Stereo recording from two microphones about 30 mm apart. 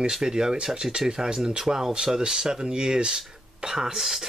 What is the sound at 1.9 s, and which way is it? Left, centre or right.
Speech, right.